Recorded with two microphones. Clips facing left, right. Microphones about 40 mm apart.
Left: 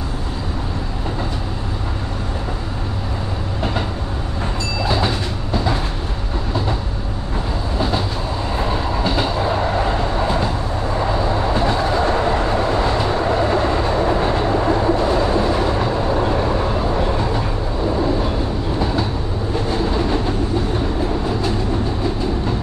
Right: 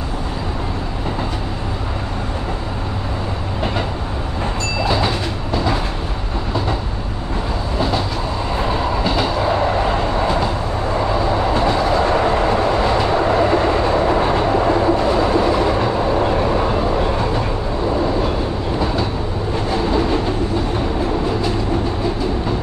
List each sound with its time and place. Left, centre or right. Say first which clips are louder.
4.8 s train: right 1 dB; centre
9.0 s train: even; centre
11.1 s train: right 2 dB; centre
12.0 s train: right 2 dB; centre